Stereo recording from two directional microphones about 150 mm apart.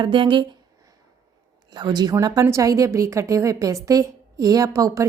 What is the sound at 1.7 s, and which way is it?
A woman's voice, 30° right (ahead or behind).